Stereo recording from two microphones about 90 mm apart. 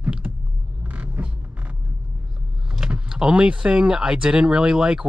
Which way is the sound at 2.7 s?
10° right (ahead or behind).